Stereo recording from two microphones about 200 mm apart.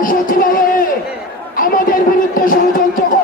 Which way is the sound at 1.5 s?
45° left (ahead or behind).